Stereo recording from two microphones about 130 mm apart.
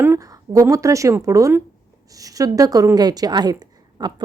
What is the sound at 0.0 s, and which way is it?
A woman's voice, 20° right (ahead or behind).